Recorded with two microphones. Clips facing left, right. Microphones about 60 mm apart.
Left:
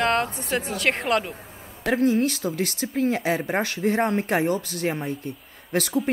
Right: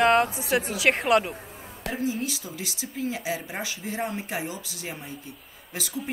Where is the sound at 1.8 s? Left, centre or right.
Left.